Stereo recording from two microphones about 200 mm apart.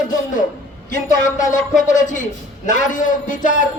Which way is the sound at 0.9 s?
40° left (ahead or behind).